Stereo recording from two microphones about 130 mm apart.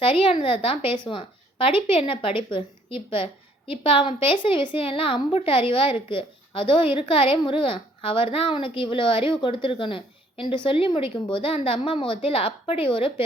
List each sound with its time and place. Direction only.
0.0 s a woman's voice: 45° left (ahead or behind)